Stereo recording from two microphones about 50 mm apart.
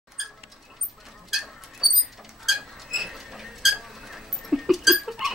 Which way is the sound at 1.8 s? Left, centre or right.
Centre.